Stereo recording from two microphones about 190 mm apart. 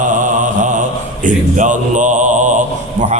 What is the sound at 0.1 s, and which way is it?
Mantra, 40° right (ahead or behind).